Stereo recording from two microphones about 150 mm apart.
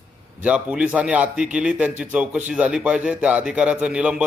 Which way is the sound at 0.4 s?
10° right (ahead or behind).